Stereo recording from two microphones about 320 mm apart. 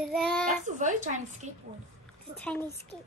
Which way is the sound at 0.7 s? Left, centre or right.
Right.